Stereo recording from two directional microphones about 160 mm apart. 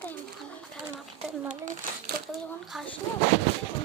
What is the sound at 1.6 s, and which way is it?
Speech, 60° right (ahead or behind).